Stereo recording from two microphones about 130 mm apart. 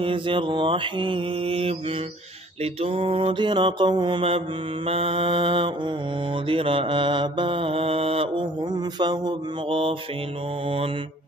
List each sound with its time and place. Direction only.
0.0 s mantra: 40° right (ahead or behind)
8.7 s mantra: 30° right (ahead or behind)